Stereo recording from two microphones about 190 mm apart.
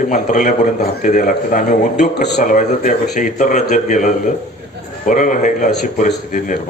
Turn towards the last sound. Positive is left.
turn(degrees=45)  # may be behind; listen again after turning